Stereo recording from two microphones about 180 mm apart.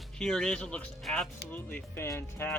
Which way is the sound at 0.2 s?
5° left (ahead or behind).